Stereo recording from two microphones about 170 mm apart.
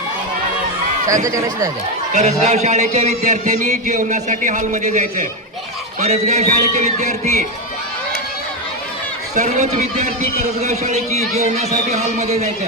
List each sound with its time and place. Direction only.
1.2 s speech: 20° right (ahead or behind)
2.1 s a man's voice: 40° right (ahead or behind)
9.3 s a man's voice: 45° right (ahead or behind)